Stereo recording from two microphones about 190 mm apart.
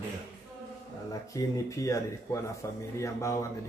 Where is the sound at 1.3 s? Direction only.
15° left (ahead or behind).